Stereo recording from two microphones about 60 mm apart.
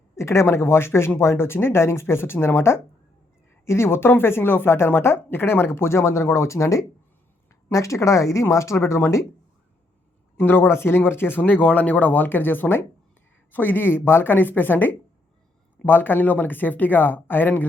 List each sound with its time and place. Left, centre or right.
0.2 s speech: left
10.3 s speech: left